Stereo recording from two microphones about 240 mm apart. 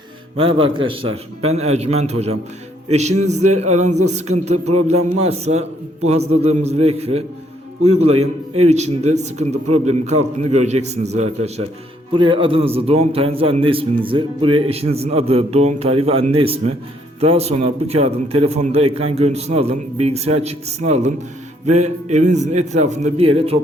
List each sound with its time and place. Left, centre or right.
0.6 s a man's voice: right